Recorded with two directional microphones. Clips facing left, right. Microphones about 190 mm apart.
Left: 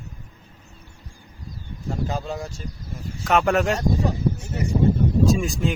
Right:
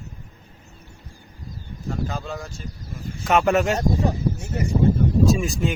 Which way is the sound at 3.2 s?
Centre (ahead or behind).